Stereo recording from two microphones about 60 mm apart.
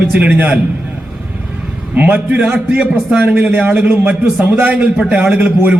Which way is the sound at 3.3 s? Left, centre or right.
Right.